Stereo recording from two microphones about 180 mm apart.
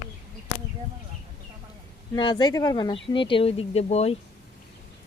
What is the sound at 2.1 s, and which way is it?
Speech, 25° left (ahead or behind).